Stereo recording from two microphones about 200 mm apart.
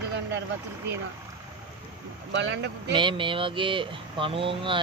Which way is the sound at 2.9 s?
25° right (ahead or behind).